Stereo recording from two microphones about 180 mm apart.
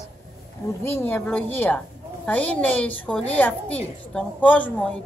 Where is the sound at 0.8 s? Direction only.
10° left (ahead or behind).